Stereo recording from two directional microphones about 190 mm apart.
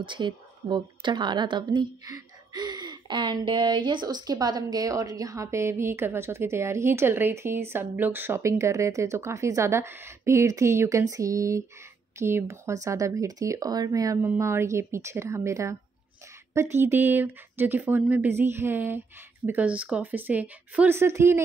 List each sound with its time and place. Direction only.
0.0 s a woman's voice: 25° right (ahead or behind)